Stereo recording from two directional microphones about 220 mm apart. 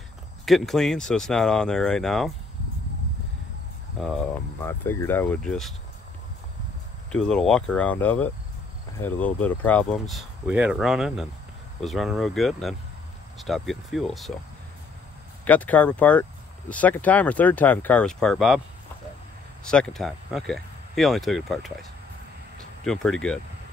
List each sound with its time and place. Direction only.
0.5 s speech: centre (ahead or behind)
4.0 s speech: centre (ahead or behind)
7.1 s speech: 5° left (ahead or behind)
15.4 s speech: 5° left (ahead or behind)
19.6 s speech: 5° left (ahead or behind)
22.8 s speech: centre (ahead or behind)